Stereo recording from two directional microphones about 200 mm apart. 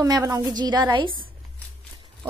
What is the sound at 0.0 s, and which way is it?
A woman's voice, 15° right (ahead or behind).